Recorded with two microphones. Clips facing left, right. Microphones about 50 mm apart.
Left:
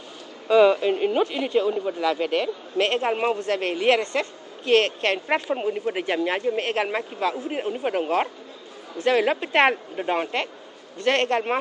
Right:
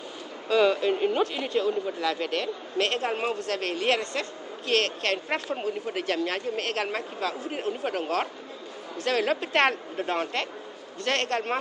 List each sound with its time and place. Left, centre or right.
0.5 s speech: centre